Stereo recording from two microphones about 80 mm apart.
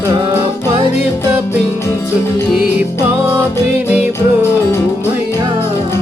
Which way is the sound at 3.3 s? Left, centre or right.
Right.